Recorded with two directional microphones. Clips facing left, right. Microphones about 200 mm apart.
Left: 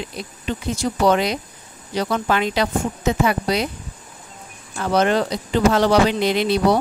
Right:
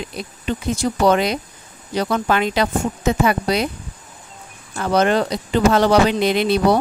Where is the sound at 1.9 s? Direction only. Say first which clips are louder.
Right 2 dB; 50° right (ahead or behind).